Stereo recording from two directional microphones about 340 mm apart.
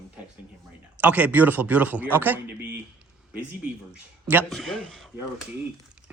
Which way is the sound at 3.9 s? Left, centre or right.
Centre.